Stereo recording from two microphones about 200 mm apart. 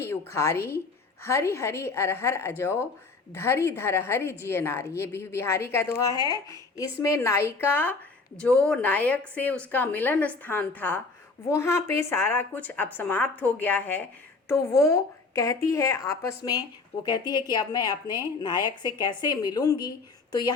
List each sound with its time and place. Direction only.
0.0 s a woman's voice: 10° left (ahead or behind)